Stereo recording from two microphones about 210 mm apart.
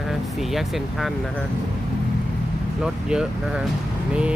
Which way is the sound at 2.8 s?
5° right (ahead or behind).